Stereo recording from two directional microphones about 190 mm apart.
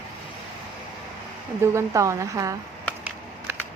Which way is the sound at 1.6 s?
15° right (ahead or behind).